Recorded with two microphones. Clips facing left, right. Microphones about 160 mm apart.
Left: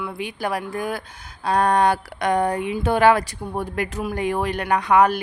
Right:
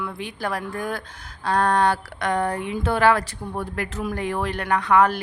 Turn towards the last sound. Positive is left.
turn(degrees=15)  # may be behind; listen again after turning